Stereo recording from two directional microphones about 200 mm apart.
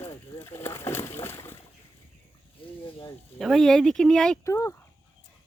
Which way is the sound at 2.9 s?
25° left (ahead or behind).